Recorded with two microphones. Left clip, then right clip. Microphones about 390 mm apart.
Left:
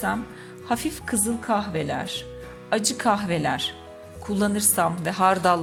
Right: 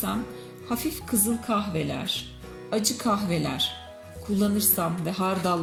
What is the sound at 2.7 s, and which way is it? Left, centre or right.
Speech, left.